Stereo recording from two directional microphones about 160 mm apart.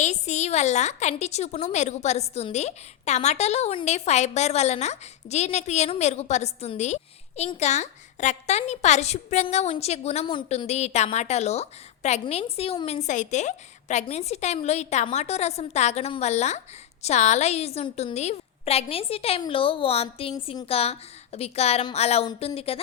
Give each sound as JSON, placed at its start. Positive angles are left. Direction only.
{"t": 0.0, "sound": "a woman's voice", "side_deg": 45}